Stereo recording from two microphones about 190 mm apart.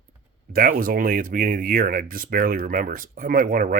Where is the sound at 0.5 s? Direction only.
50° right (ahead or behind).